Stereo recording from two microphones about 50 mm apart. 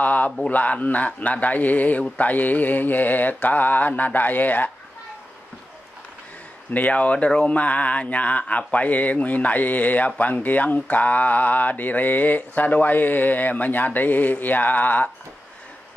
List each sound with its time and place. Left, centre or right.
0.0 s a sound: left
0.5 s speech: left
6.7 s speech: left